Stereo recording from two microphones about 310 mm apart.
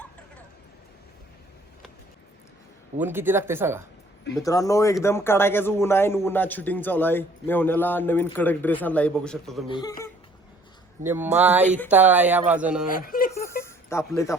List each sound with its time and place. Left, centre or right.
3.0 s speech: centre
4.4 s a man's voice: centre
9.6 s a man's voice: centre
11.0 s speech: centre
12.9 s a sound: left
13.5 s a sound: centre
14.0 s speech: centre